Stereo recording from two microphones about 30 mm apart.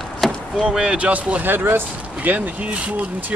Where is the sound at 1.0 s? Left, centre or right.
Right.